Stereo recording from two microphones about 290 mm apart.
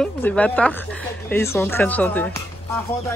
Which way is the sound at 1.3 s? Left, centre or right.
Centre.